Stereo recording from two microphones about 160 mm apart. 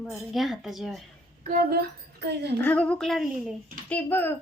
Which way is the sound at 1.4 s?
60° right (ahead or behind).